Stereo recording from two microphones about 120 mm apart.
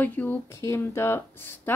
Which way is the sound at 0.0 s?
15° left (ahead or behind).